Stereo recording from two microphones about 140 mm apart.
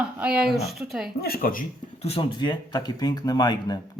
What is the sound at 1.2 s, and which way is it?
Speech, 90° left.